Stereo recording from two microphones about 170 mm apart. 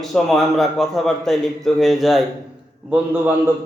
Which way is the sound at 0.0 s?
Centre (ahead or behind).